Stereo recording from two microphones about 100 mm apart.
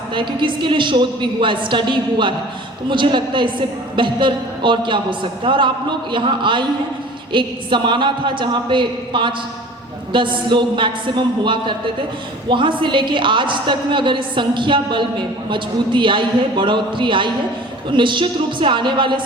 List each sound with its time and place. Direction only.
0.1 s a woman's voice: 55° right (ahead or behind)